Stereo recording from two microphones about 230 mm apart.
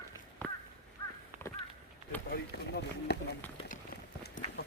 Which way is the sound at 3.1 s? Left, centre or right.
Left.